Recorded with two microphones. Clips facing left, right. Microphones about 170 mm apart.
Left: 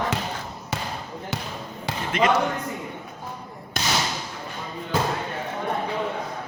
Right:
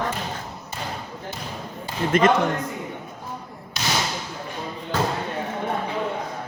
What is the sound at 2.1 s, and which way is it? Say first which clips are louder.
Speech: right 4 dB; 45° right (ahead or behind).